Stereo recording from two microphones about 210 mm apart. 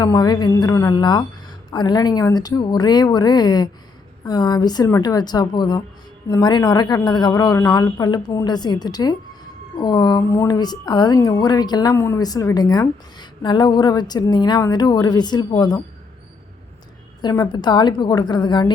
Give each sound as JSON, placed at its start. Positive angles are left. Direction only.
{"t": 0.0, "sound": "a woman's voice", "side_deg": 20}
{"t": 17.2, "sound": "a woman's voice", "side_deg": 20}